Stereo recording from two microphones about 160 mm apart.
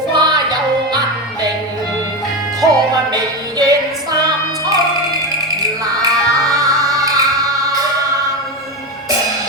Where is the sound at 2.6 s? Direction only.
25° right (ahead or behind).